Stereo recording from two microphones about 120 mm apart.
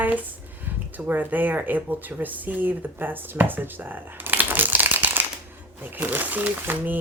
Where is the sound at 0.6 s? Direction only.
15° right (ahead or behind).